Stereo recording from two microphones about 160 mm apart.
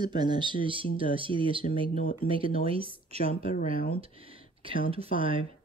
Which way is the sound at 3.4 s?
60° left (ahead or behind).